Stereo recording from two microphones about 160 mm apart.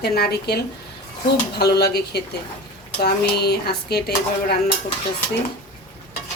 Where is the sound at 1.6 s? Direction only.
90° left.